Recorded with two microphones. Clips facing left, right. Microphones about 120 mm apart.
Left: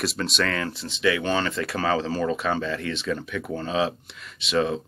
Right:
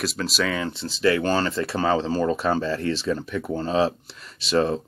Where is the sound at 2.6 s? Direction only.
35° right (ahead or behind).